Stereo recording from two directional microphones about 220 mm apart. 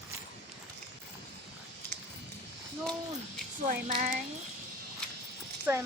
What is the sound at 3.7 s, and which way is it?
Speech, 35° right (ahead or behind).